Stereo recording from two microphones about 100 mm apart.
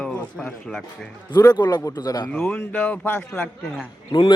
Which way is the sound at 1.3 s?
45° left (ahead or behind).